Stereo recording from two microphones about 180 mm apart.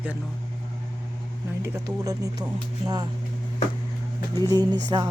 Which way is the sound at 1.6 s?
20° right (ahead or behind).